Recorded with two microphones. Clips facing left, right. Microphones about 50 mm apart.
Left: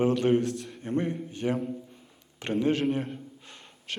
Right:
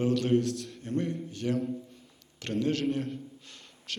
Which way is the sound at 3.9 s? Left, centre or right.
Left.